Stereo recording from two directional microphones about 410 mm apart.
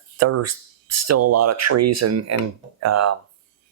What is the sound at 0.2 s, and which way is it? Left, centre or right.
Speech, right.